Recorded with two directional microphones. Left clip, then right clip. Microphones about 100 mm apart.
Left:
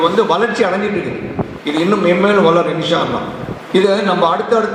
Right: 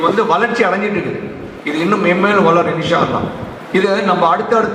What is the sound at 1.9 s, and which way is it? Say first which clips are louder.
A man's voice: even; 45° right (ahead or behind).